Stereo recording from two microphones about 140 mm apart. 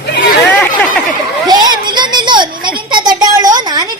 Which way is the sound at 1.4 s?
30° right (ahead or behind).